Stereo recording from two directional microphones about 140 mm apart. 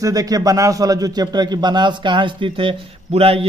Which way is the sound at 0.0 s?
25° right (ahead or behind).